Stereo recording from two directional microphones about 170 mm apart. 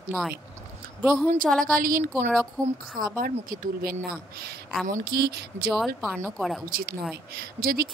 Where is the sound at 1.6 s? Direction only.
55° right (ahead or behind).